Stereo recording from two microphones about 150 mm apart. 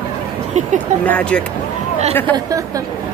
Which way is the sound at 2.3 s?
20° right (ahead or behind).